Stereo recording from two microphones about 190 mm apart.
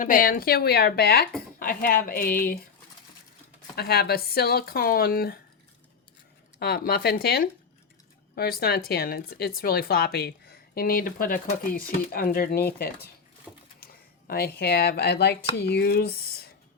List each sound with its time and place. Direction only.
0.0 s speech: 45° left (ahead or behind)
3.8 s speech: 55° left (ahead or behind)
6.6 s speech: 50° left (ahead or behind)
13.7 s a sound: 50° left (ahead or behind)
14.6 s speech: 55° left (ahead or behind)